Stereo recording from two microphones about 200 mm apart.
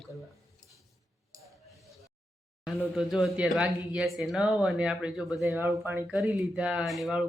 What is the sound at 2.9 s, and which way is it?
Speech, centre (ahead or behind).